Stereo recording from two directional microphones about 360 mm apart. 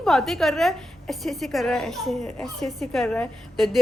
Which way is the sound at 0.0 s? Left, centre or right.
Centre.